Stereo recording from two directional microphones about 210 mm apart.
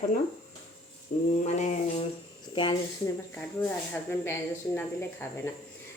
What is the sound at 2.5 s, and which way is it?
Speech, 20° left (ahead or behind).